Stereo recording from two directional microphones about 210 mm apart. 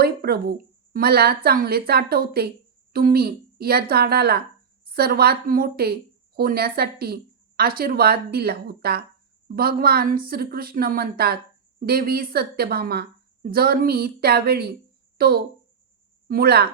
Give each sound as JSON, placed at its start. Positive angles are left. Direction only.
{"t": 0.0, "sound": "a woman's voice", "side_deg": -45}